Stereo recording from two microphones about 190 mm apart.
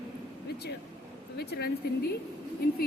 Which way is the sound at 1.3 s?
60° left (ahead or behind).